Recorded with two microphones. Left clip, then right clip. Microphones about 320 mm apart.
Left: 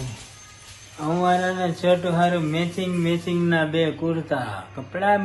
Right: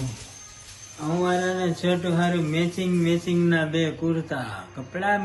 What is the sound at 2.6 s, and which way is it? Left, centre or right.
Speech, centre.